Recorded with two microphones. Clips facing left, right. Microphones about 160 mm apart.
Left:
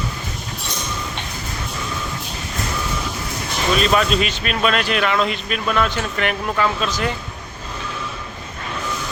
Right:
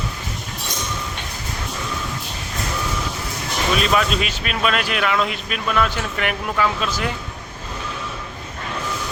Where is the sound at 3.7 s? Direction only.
5° right (ahead or behind).